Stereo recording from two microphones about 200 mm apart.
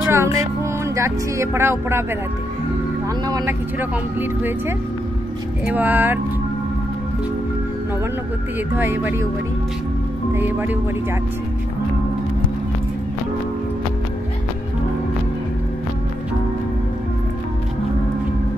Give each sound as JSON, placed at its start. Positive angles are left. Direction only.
{"t": 0.1, "sound": "music", "side_deg": -15}
{"t": 3.3, "sound": "speech", "side_deg": -20}
{"t": 8.7, "sound": "speech", "side_deg": -10}
{"t": 10.3, "sound": "speech", "side_deg": -10}